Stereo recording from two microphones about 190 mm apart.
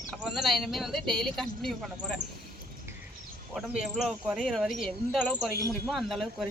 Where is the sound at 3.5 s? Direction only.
Centre (ahead or behind).